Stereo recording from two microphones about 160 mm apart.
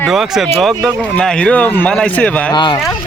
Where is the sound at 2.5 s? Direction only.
30° left (ahead or behind).